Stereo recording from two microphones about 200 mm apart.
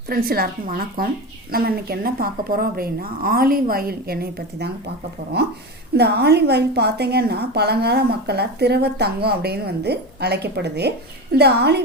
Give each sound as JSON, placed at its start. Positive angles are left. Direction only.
{"t": 0.1, "sound": "a woman's voice", "side_deg": -50}
{"t": 6.0, "sound": "a woman's voice", "side_deg": -55}